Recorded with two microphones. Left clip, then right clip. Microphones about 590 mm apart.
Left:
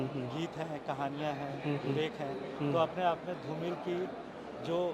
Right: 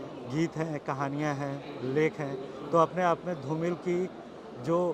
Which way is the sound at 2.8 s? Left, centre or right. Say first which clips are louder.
Right 6 dB; right.